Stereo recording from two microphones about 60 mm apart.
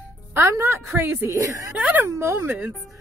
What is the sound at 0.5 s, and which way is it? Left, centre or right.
Speech, right.